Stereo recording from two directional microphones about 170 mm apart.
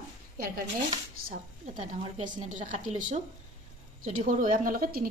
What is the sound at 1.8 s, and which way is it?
A woman's voice, 50° right (ahead or behind).